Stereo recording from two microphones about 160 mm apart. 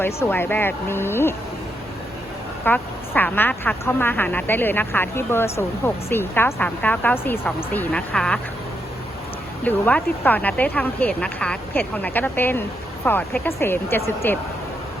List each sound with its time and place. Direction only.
0.0 s speech: 15° left (ahead or behind)
2.6 s speech: 10° left (ahead or behind)
9.6 s speech: 10° left (ahead or behind)